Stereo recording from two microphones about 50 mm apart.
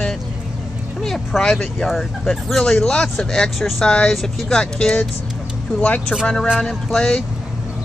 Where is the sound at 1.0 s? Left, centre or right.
Centre.